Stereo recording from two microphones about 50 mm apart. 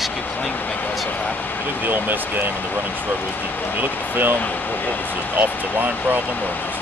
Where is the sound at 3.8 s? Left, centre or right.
Right.